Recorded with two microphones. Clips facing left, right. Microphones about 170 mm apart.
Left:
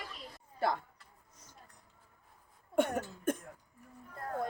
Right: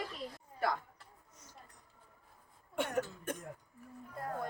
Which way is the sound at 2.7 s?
50° left (ahead or behind).